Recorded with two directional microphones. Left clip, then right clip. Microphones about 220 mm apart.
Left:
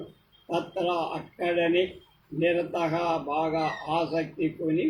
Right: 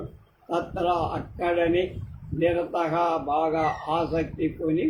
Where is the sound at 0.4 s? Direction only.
15° right (ahead or behind).